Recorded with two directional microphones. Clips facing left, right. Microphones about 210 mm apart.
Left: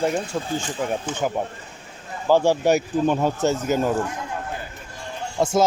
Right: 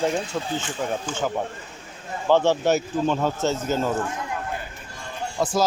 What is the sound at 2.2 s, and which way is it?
Speech, 10° left (ahead or behind).